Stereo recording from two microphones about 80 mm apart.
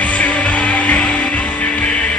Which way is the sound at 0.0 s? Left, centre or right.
Centre.